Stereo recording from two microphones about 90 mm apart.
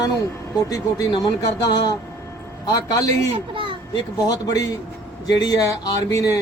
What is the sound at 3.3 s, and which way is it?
Speech, 75° right (ahead or behind).